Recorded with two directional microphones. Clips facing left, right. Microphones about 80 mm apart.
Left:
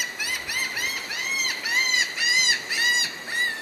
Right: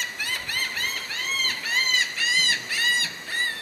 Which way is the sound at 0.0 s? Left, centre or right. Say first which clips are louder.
Even; centre.